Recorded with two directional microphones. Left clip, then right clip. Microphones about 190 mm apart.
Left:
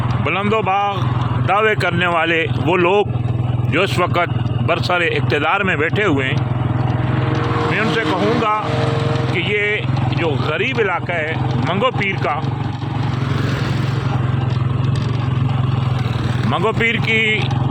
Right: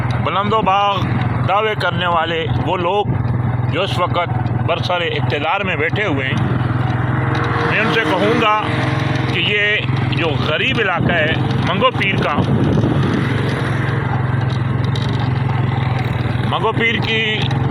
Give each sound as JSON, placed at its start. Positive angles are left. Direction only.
{"t": 0.6, "sound": "speech", "side_deg": 20}
{"t": 1.5, "sound": "speech", "side_deg": 45}
{"t": 8.1, "sound": "speech", "side_deg": 5}
{"t": 9.3, "sound": "speech", "side_deg": 20}
{"t": 16.5, "sound": "speech", "side_deg": 35}